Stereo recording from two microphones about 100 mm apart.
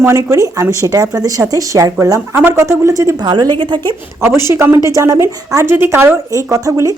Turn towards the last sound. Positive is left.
turn(degrees=-30)  # may be behind; listen again after turning